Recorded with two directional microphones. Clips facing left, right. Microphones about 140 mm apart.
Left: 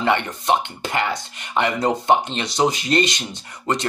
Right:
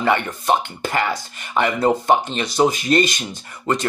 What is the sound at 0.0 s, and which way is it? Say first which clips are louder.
Speech: right 1 dB; 25° left (ahead or behind).